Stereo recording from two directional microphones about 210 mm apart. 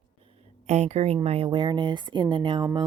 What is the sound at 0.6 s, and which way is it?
Speech, 30° right (ahead or behind).